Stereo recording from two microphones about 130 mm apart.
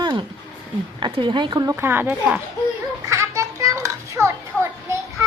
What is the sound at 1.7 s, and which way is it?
Speech, 20° right (ahead or behind).